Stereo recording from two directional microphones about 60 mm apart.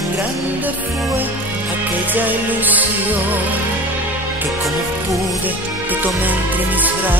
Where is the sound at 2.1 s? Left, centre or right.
Right.